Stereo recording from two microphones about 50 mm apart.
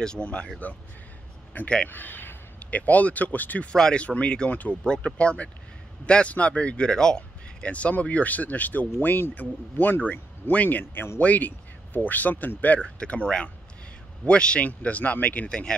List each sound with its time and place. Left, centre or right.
0.2 s speech: left
1.5 s a man's voice: left
3.6 s speech: centre
4.5 s speech: left
4.8 s speech: left
7.6 s speech: left
12.8 s speech: left
15.4 s speech: centre